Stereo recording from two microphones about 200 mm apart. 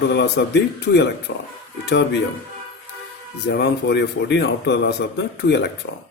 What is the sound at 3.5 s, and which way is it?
Speech, 60° left (ahead or behind).